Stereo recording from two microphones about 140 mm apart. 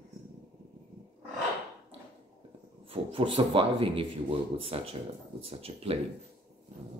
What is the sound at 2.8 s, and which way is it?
Speech, 40° right (ahead or behind).